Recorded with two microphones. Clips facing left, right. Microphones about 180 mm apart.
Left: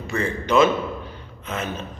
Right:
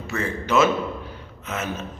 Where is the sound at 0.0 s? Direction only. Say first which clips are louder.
Left 2 dB; 5° right (ahead or behind).